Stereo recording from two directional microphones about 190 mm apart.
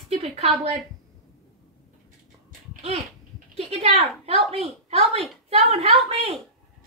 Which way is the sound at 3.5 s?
30° right (ahead or behind).